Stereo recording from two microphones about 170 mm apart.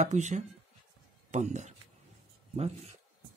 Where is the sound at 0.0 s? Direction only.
45° right (ahead or behind).